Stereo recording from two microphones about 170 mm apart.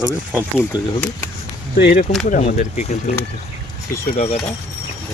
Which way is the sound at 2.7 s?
40° left (ahead or behind).